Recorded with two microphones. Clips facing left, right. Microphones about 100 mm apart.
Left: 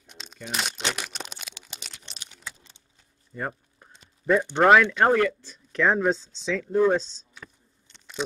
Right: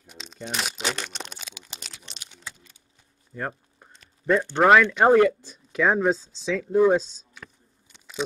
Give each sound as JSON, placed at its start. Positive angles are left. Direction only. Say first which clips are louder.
{"t": 0.0, "sound": "crumpling", "louder": "right 3 dB", "side_deg": 0}
{"t": 0.9, "sound": "a sound", "louder": "right 1 dB", "side_deg": 5}
{"t": 1.6, "sound": "typing", "louder": "right 1 dB", "side_deg": 0}
{"t": 2.0, "sound": "a sound", "louder": "left 2 dB", "side_deg": 0}
{"t": 4.6, "sound": "speech", "louder": "right 1 dB", "side_deg": 0}
{"t": 4.9, "sound": "speech", "louder": "right 4 dB", "side_deg": -20}